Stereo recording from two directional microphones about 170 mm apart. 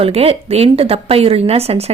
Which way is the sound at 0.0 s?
35° right (ahead or behind).